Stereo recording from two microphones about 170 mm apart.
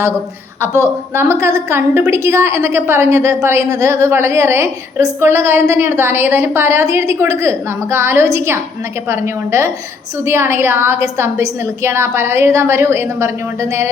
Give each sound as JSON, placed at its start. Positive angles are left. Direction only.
{"t": 0.8, "sound": "a woman's voice", "side_deg": -15}